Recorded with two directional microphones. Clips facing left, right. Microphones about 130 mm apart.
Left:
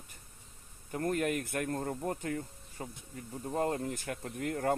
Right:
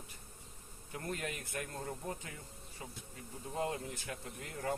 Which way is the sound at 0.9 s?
50° left (ahead or behind).